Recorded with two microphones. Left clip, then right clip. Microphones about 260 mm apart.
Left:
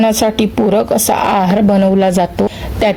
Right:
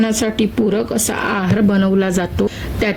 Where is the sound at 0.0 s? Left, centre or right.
Centre.